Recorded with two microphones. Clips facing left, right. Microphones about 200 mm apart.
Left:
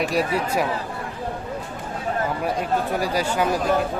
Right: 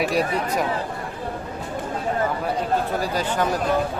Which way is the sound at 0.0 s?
Centre (ahead or behind).